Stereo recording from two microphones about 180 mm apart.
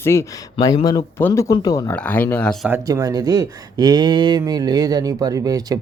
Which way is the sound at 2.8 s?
20° right (ahead or behind).